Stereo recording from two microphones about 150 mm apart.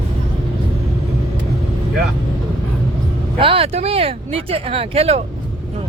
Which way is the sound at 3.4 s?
35° right (ahead or behind).